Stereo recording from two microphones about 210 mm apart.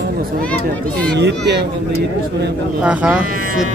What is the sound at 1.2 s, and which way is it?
Speech, 55° right (ahead or behind).